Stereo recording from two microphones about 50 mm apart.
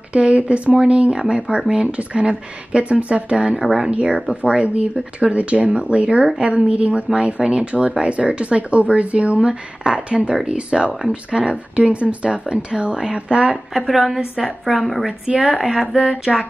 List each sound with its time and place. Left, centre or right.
0.1 s speech: right
13.7 s a woman's voice: centre
15.2 s a woman's voice: centre